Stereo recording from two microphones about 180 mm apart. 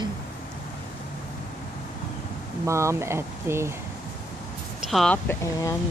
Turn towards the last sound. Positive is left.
turn(degrees=15)  # may be behind; listen again after turning